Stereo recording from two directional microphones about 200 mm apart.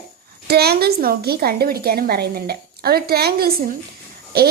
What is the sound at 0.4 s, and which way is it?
A woman's voice, 55° right (ahead or behind).